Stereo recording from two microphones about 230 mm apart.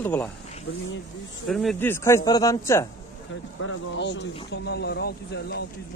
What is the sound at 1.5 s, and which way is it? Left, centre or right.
Speech, centre.